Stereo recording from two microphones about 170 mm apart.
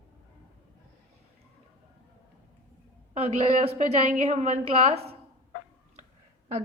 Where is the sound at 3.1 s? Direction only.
35° right (ahead or behind).